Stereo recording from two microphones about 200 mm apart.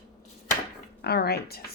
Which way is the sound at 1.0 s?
55° left (ahead or behind).